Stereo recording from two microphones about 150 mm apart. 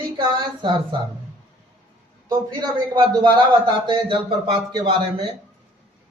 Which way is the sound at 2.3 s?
30° right (ahead or behind).